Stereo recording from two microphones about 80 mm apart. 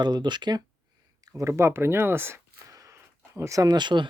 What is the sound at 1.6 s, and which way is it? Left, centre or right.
Speech, right.